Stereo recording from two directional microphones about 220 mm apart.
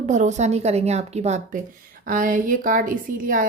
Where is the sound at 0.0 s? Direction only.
35° right (ahead or behind).